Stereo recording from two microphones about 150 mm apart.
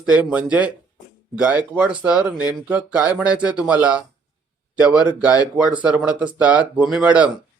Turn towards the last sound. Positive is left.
turn(degrees=-10)  # may be behind; listen again after turning